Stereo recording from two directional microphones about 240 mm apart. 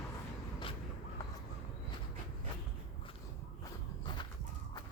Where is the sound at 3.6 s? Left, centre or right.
Centre.